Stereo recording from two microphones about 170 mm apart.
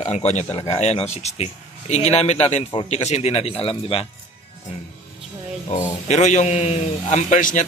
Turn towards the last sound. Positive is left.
turn(degrees=45)  # may be behind; listen again after turning